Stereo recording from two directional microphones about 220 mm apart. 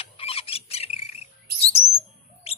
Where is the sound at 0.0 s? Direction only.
25° left (ahead or behind).